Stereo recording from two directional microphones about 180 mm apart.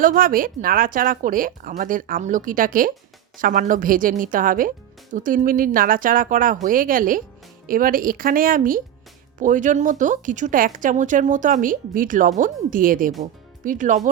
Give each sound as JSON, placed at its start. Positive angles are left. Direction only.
{"t": 0.0, "sound": "speech", "side_deg": -50}